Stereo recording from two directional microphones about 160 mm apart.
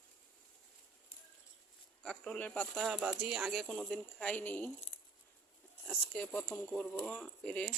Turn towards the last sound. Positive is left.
turn(degrees=5)  # may be behind; listen again after turning